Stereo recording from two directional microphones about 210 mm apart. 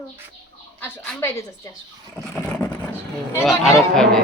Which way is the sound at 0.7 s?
10° left (ahead or behind).